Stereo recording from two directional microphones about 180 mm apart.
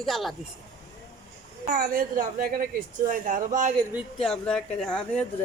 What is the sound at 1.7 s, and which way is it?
A woman's voice, 50° right (ahead or behind).